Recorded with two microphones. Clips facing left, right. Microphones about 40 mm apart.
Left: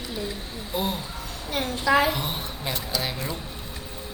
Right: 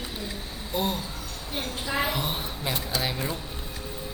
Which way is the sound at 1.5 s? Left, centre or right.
Left.